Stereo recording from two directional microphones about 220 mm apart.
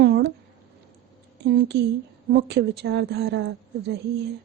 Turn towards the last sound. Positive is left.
turn(degrees=-50)  # may be behind; listen again after turning